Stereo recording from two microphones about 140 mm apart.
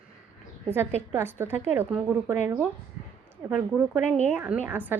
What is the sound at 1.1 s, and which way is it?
Speech, 15° right (ahead or behind).